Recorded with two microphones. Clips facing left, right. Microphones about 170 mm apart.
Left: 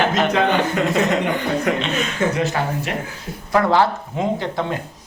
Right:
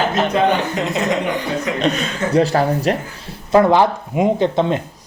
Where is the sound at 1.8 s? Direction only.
35° right (ahead or behind).